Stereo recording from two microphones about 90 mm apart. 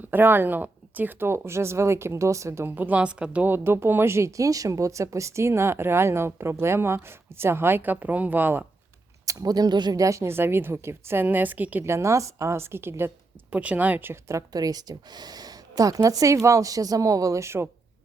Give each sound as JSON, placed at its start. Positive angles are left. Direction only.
{"t": 0.0, "sound": "speech", "side_deg": -20}
{"t": 2.6, "sound": "a woman's voice", "side_deg": -20}
{"t": 3.4, "sound": "speech", "side_deg": -25}
{"t": 9.2, "sound": "speech", "side_deg": -40}
{"t": 10.0, "sound": "speech", "side_deg": -35}
{"t": 11.9, "sound": "speech", "side_deg": -30}
{"t": 14.5, "sound": "a woman's voice", "side_deg": -45}